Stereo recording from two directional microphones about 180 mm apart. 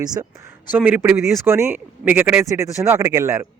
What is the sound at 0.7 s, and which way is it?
A man's voice, 10° right (ahead or behind).